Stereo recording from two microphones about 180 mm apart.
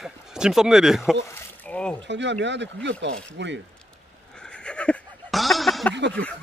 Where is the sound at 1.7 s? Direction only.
5° left (ahead or behind).